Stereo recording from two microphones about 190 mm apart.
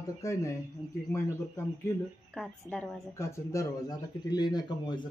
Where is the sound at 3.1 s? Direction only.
15° left (ahead or behind).